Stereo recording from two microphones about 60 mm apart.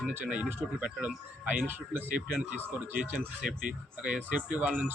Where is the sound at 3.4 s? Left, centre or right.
Centre.